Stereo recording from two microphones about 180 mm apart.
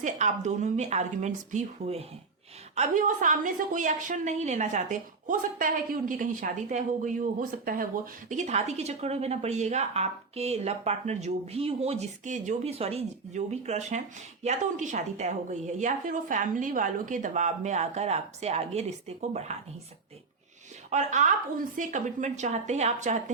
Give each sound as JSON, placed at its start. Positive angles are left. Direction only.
{"t": 0.0, "sound": "a woman's voice", "side_deg": -40}
{"t": 20.9, "sound": "a woman's voice", "side_deg": -40}